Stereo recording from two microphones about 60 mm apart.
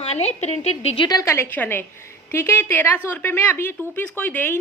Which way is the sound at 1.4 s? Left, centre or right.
Left.